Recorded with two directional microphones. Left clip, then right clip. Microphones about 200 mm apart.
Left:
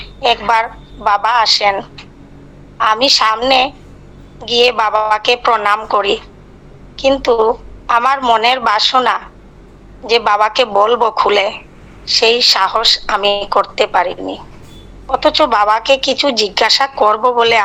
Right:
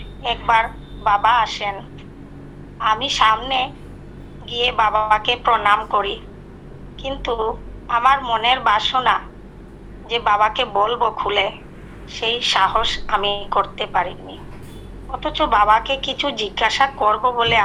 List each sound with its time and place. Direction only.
0.0 s a woman's voice: 65° left (ahead or behind)